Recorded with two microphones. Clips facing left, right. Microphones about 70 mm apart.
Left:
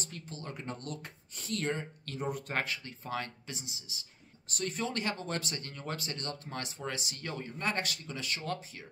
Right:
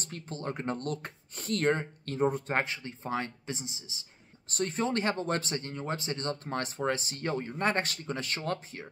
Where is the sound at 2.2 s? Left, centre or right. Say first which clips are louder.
Right 6 dB; right.